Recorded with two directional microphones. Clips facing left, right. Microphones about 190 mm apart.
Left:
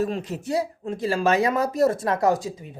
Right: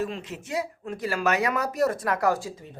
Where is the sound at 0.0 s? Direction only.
40° left (ahead or behind).